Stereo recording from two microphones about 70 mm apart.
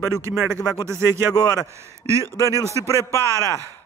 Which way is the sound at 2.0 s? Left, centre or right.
Left.